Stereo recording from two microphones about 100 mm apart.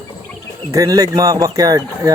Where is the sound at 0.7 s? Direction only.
35° right (ahead or behind).